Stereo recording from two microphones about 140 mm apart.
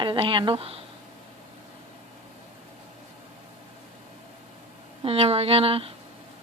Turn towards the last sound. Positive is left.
turn(degrees=-45)  # may be behind; listen again after turning